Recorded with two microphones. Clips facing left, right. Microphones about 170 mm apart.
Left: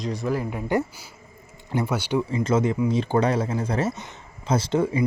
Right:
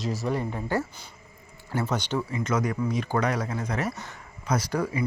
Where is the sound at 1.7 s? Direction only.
15° left (ahead or behind).